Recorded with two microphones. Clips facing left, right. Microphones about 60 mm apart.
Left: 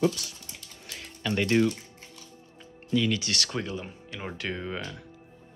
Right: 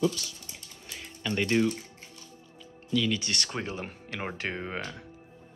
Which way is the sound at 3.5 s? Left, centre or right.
Right.